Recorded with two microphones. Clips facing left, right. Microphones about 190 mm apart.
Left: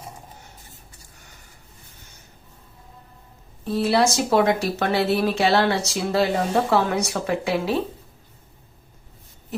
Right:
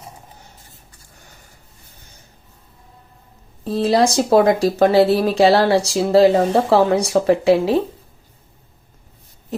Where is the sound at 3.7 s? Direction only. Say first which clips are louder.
Right 4 dB; 35° right (ahead or behind).